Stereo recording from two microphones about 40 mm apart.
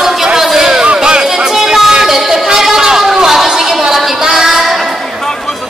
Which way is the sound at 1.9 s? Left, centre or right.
Centre.